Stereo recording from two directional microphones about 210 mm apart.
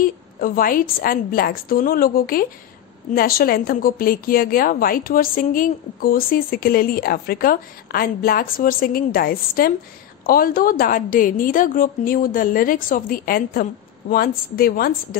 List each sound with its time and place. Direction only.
0.0 s a woman's voice: 40° left (ahead or behind)